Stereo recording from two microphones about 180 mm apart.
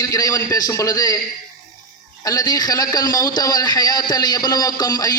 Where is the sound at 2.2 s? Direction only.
20° left (ahead or behind).